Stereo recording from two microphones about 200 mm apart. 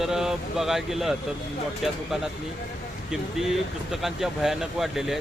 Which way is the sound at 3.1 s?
Centre (ahead or behind).